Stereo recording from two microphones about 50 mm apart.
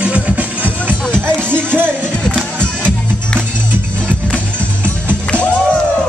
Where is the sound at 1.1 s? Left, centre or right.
Left.